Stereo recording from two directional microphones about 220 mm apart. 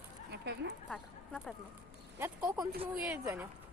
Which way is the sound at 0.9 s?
Centre (ahead or behind).